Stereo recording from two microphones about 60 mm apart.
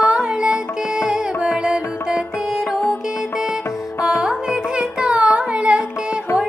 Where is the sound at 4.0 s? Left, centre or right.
Centre.